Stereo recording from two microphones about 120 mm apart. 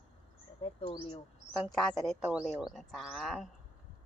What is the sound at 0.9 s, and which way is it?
Speech, 40° left (ahead or behind).